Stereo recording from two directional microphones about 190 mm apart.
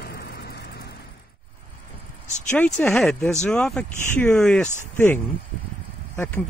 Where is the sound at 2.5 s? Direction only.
5° left (ahead or behind).